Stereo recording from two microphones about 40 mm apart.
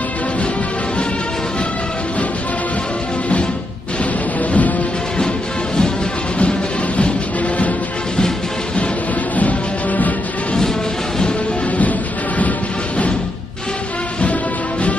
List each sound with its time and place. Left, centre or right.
4.0 s music: left
9.4 s music: left
12.4 s music: left